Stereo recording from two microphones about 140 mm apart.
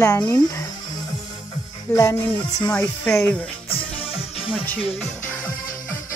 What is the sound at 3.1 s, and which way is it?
Speech, 10° left (ahead or behind).